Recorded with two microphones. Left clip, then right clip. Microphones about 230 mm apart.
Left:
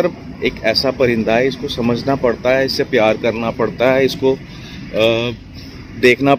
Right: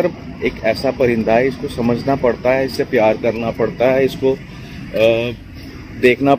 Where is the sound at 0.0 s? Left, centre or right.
Centre.